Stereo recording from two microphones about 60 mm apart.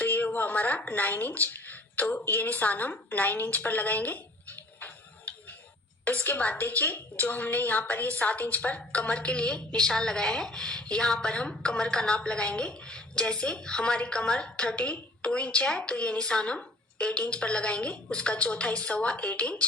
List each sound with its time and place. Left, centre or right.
0.0 s a woman's voice: left
4.8 s tick-tock: left
6.1 s a woman's voice: left